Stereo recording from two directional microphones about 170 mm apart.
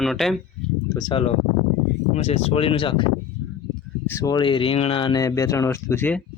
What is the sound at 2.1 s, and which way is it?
Speech, 40° left (ahead or behind).